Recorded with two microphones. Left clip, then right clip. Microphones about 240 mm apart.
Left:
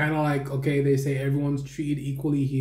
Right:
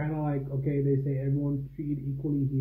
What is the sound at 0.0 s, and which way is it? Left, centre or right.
Speech, centre.